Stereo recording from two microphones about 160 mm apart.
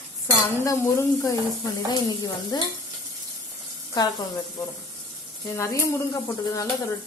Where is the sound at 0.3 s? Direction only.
20° left (ahead or behind).